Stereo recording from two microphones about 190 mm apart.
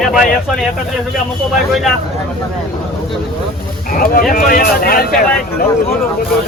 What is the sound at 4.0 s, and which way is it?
Speech, 50° left (ahead or behind).